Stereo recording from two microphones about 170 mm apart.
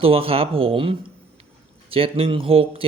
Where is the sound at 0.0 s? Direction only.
35° right (ahead or behind).